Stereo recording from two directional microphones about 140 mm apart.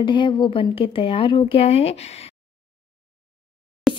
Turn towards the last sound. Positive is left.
turn(degrees=0)  # may be behind; listen again after turning